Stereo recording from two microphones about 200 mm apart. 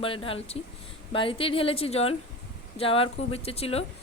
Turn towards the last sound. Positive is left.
turn(degrees=30)  # may be behind; listen again after turning